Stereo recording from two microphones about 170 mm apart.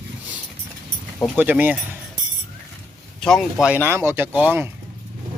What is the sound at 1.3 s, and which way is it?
Speech, 10° right (ahead or behind).